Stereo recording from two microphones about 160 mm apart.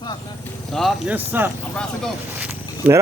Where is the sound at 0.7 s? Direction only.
Centre (ahead or behind).